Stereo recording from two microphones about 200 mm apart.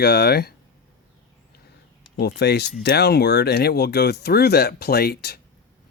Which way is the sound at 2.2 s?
55° left (ahead or behind).